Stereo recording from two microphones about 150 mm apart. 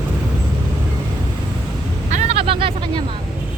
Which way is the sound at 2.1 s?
55° right (ahead or behind).